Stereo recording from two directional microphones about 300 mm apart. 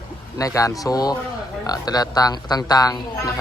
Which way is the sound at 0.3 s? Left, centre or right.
Centre.